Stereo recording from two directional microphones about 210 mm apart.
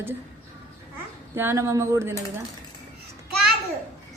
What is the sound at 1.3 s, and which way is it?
Speech, 10° right (ahead or behind).